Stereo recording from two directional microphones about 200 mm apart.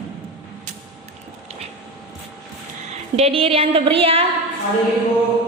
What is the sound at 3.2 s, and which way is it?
A woman's voice, 30° right (ahead or behind).